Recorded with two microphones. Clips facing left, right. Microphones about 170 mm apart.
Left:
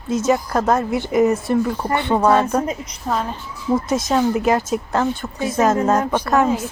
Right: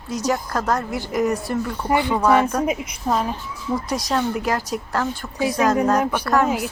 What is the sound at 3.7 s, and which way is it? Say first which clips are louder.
A woman's voice: left 4 dB; 25° left (ahead or behind).